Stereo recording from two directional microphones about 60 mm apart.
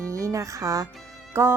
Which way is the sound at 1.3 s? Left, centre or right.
Right.